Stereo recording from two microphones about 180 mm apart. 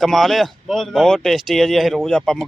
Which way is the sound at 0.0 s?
Centre (ahead or behind).